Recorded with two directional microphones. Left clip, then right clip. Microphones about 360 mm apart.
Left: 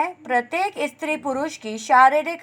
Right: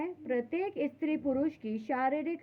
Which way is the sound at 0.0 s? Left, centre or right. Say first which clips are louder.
Left 12 dB; left.